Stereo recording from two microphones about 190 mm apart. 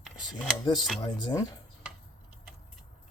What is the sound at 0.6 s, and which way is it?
Speech, 20° left (ahead or behind).